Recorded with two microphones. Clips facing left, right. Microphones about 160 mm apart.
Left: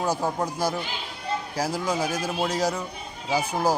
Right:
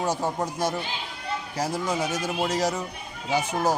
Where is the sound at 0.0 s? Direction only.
Centre (ahead or behind).